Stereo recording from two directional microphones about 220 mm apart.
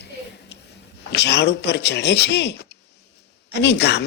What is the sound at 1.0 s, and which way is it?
A man's voice, 50° left (ahead or behind).